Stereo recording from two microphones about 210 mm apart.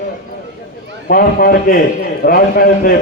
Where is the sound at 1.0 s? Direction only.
45° left (ahead or behind).